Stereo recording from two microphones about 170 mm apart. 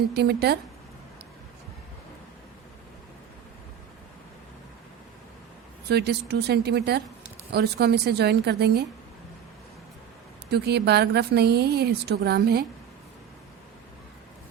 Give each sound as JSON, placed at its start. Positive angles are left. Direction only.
{"t": 0.1, "sound": "speech", "side_deg": -70}
{"t": 5.9, "sound": "speech", "side_deg": -75}
{"t": 10.5, "sound": "speech", "side_deg": -75}